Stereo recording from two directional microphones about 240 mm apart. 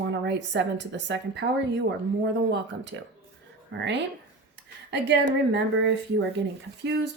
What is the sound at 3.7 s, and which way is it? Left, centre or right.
Speech, right.